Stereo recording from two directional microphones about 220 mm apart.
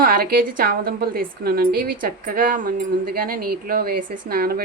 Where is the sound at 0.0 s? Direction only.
40° right (ahead or behind).